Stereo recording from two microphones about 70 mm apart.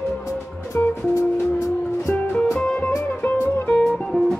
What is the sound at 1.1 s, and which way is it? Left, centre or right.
Music, left.